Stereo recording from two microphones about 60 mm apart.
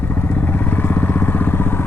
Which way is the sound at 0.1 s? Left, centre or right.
Left.